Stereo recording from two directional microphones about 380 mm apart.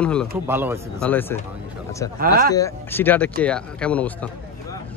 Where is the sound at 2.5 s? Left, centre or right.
Centre.